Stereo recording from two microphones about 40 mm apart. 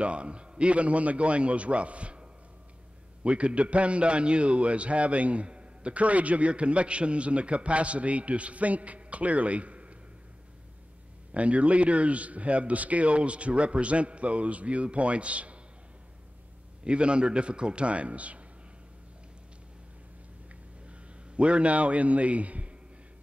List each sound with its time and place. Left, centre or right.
0.0 s a man's voice: right
3.3 s a man's voice: right
11.3 s a man's voice: right
16.8 s a man's voice: right
21.4 s a man's voice: right